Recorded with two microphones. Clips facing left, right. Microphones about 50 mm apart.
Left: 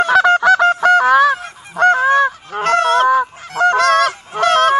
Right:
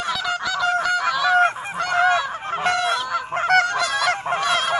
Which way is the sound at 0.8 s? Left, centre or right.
Left.